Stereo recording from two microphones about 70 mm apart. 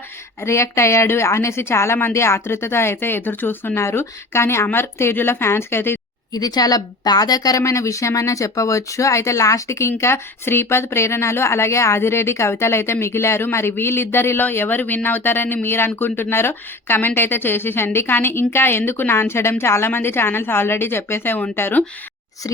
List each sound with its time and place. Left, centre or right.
0.4 s a woman's voice: left
6.3 s a woman's voice: left